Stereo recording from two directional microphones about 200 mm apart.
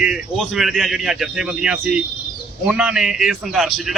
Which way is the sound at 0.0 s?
Centre (ahead or behind).